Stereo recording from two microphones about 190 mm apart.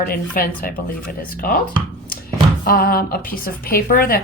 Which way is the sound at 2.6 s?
50° left (ahead or behind).